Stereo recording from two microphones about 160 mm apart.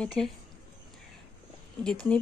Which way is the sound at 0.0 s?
Centre (ahead or behind).